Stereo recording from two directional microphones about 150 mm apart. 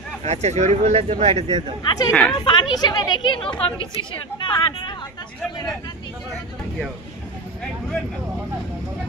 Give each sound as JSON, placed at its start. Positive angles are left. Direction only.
{"t": 0.2, "sound": "speech", "side_deg": -50}
{"t": 1.8, "sound": "speech", "side_deg": 30}
{"t": 2.0, "sound": "a woman's voice", "side_deg": 0}
{"t": 2.3, "sound": "speech", "side_deg": 30}